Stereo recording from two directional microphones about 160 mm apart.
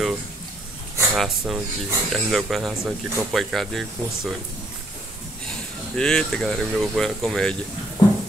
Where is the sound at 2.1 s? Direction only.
Centre (ahead or behind).